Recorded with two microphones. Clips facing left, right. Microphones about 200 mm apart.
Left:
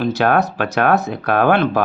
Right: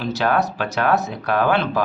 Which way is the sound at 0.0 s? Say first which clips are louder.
Left 4 dB; 55° left (ahead or behind).